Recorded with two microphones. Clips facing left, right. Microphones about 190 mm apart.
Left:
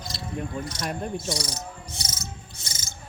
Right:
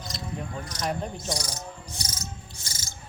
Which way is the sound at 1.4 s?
25° left (ahead or behind).